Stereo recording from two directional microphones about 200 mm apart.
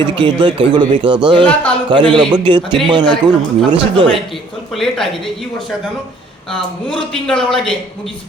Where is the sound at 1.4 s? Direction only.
5° left (ahead or behind).